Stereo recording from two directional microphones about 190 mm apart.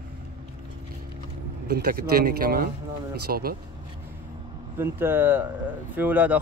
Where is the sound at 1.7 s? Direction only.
55° right (ahead or behind).